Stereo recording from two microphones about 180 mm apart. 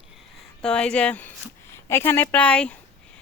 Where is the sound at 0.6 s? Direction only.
5° left (ahead or behind).